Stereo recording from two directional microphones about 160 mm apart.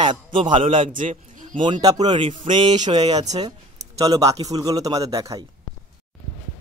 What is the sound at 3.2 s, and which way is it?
Speech, 45° right (ahead or behind).